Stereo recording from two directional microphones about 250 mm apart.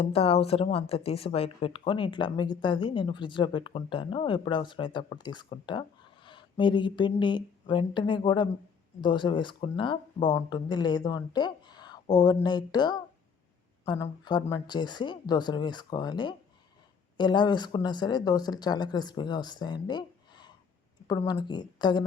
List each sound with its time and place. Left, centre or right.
0.0 s a woman's voice: left